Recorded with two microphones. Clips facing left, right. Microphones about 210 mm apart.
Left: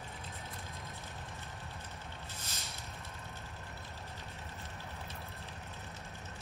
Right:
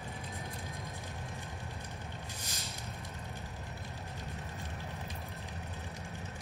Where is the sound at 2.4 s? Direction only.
15° right (ahead or behind).